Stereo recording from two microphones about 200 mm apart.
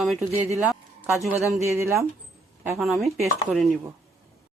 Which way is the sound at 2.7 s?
Centre (ahead or behind).